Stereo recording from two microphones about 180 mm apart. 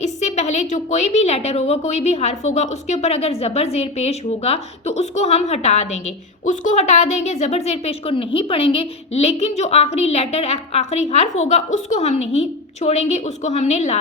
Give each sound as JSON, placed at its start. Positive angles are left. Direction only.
{"t": 0.0, "sound": "a woman's voice", "side_deg": 40}